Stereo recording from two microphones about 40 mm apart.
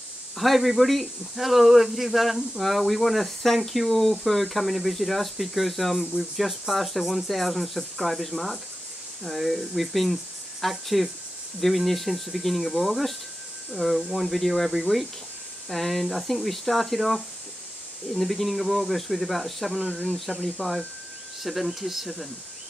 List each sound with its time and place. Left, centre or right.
0.4 s speech: centre
19.9 s speech: centre
20.2 s speech: centre